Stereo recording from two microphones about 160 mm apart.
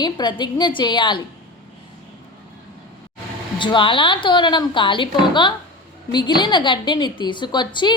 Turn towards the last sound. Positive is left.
turn(degrees=30)  # may be behind; listen again after turning